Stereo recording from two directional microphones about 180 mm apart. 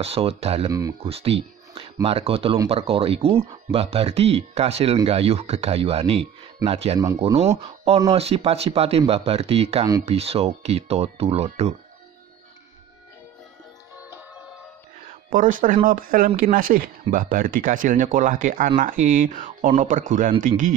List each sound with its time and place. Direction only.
0.0 s speech: 35° right (ahead or behind)
0.7 s speech: 20° right (ahead or behind)
1.0 s speech: 35° right (ahead or behind)
15.2 s speech: 50° right (ahead or behind)